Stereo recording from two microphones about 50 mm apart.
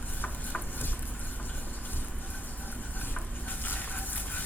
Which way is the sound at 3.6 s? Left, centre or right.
Left.